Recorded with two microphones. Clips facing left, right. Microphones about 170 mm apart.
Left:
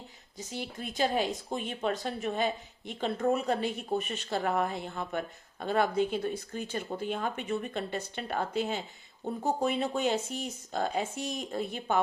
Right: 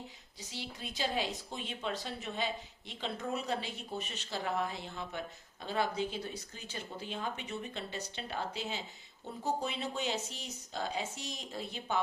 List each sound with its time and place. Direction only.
0.3 s speech: 50° left (ahead or behind)